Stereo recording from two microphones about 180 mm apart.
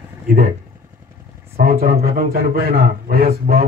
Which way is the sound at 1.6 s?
55° right (ahead or behind).